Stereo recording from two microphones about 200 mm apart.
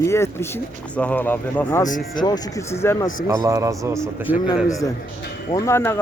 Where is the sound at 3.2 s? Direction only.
15° right (ahead or behind).